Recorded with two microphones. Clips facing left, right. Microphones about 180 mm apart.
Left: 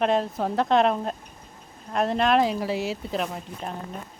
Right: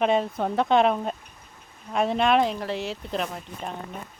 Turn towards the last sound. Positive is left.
turn(degrees=5)  # may be behind; listen again after turning